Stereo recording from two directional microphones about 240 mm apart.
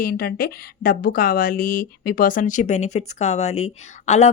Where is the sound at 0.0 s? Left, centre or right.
Left.